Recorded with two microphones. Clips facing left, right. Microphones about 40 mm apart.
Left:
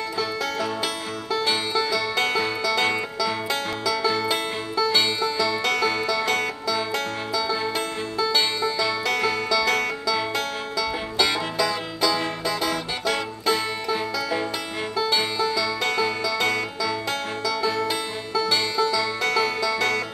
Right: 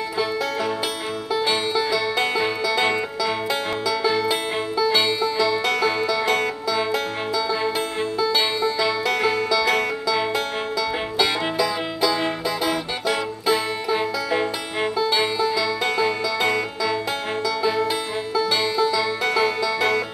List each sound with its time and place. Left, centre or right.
1.3 s music: centre